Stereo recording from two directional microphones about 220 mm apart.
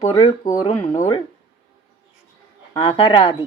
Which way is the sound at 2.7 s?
25° left (ahead or behind).